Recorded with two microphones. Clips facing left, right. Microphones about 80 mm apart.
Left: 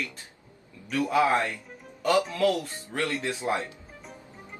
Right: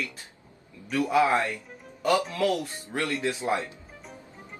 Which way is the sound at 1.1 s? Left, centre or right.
Centre.